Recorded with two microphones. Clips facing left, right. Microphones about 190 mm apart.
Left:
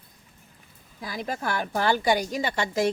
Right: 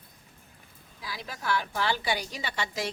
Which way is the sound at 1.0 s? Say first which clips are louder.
Left 8 dB; 50° left (ahead or behind).